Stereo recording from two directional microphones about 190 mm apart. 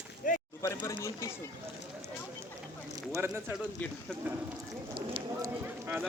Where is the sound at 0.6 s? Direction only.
15° left (ahead or behind).